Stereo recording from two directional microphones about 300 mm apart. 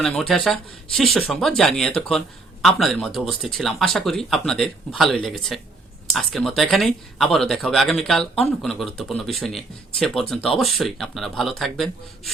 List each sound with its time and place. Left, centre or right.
0.0 s speech: centre